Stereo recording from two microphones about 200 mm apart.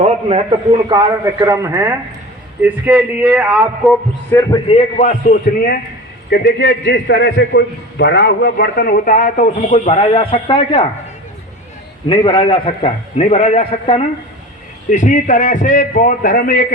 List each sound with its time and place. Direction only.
0.0 s a sound: 30° right (ahead or behind)
0.9 s a man's voice: 20° right (ahead or behind)
4.3 s a man's voice: 15° left (ahead or behind)
4.7 s a man's voice: 35° left (ahead or behind)
6.3 s a man's voice: 55° left (ahead or behind); by 10.8 s 25° left (ahead or behind)
12.0 s a man's voice: 25° left (ahead or behind); by 16.6 s 45° left (ahead or behind)